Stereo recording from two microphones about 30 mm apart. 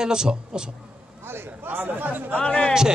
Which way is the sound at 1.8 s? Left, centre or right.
Right.